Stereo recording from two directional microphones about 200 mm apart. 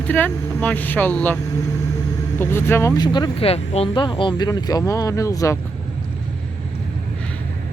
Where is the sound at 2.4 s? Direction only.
10° left (ahead or behind).